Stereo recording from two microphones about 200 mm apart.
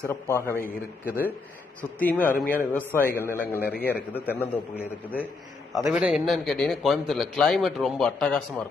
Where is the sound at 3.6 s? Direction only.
50° left (ahead or behind).